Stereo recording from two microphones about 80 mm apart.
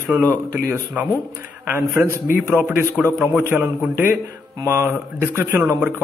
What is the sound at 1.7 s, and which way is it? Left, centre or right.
A man's voice, right.